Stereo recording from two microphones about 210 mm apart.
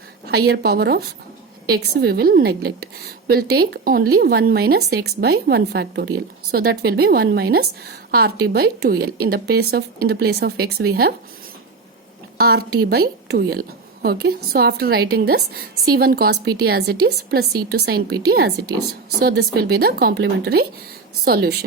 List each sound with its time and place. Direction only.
0.3 s a woman's voice: 50° right (ahead or behind)
12.4 s a woman's voice: 45° right (ahead or behind)